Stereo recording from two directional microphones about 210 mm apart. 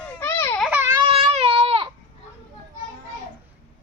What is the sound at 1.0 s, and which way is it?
Child singing, 25° right (ahead or behind).